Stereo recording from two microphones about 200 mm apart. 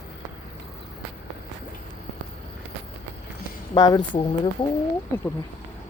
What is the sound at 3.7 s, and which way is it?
Speech, 20° left (ahead or behind).